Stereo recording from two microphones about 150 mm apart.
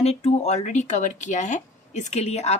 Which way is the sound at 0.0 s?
45° left (ahead or behind).